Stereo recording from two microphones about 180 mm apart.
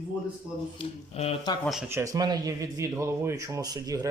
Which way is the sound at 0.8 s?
35° left (ahead or behind).